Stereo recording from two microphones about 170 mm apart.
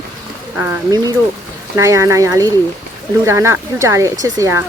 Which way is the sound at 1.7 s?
15° right (ahead or behind).